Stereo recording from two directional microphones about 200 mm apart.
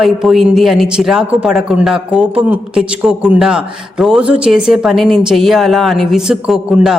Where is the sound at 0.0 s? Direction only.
Centre (ahead or behind).